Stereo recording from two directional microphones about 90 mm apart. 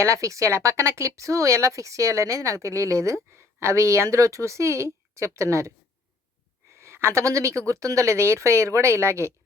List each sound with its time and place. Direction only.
0.0 s speech: 35° right (ahead or behind)
6.7 s speech: 30° right (ahead or behind)